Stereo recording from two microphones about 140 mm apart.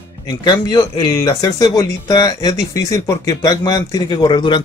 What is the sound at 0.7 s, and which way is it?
A man's voice, 30° left (ahead or behind).